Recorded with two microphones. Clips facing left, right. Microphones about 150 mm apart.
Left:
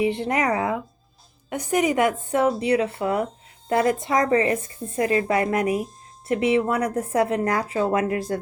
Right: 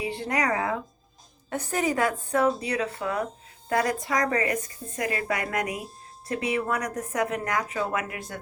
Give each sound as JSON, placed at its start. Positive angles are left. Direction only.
{"t": 0.0, "sound": "a woman's voice", "side_deg": 20}